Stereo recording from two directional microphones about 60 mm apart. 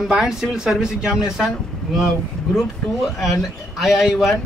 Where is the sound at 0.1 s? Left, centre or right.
Centre.